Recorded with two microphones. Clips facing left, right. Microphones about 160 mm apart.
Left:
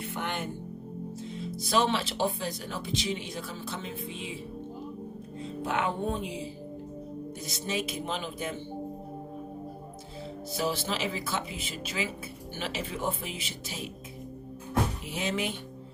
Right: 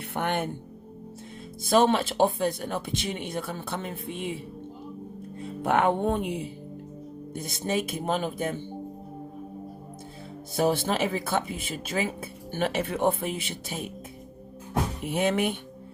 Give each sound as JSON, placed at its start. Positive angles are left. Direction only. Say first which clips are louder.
{"t": 0.0, "sound": "music", "louder": "right 5 dB", "side_deg": -60}
{"t": 1.2, "sound": "speech", "louder": "left 5 dB", "side_deg": -50}
{"t": 5.4, "sound": "speech", "louder": "right 6 dB", "side_deg": -60}
{"t": 10.5, "sound": "speech", "louder": "right 7 dB", "side_deg": -55}
{"t": 15.0, "sound": "speech", "louder": "right 7 dB", "side_deg": -55}